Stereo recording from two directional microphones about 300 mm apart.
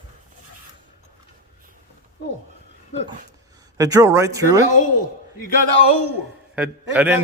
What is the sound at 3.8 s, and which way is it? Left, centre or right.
Speech, centre.